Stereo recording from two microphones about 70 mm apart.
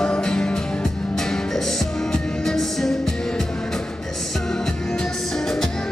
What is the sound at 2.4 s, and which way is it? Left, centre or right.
Music, centre.